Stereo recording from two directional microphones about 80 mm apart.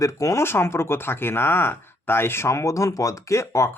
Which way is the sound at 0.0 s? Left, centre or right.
Left.